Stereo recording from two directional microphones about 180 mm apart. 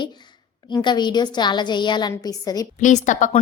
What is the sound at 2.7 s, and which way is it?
Speech, 45° left (ahead or behind).